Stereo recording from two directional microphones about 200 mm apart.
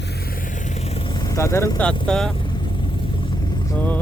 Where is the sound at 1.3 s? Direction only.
15° left (ahead or behind).